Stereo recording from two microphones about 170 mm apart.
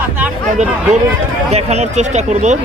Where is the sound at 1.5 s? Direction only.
40° right (ahead or behind).